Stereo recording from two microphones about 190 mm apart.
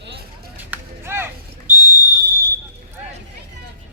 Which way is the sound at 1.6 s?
45° right (ahead or behind).